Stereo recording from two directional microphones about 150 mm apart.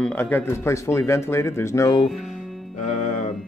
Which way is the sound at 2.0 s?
Centre (ahead or behind).